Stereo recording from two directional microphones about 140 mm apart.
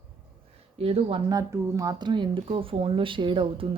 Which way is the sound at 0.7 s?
45° right (ahead or behind).